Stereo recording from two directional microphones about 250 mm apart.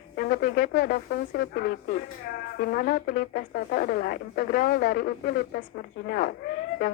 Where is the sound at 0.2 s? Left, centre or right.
Left.